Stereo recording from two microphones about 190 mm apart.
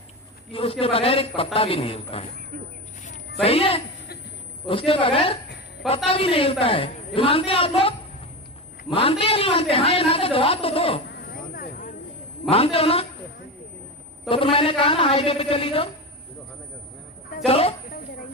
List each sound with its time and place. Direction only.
0.5 s a woman's voice: 30° left (ahead or behind)
3.4 s a man's voice: 30° left (ahead or behind)
11.3 s vehicle: 50° left (ahead or behind)
12.5 s a man's voice: 30° left (ahead or behind)
14.3 s a woman's voice: 30° left (ahead or behind)
17.4 s a man's voice: 30° left (ahead or behind)